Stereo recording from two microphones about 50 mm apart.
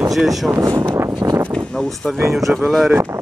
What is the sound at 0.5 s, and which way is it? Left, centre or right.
Speech, right.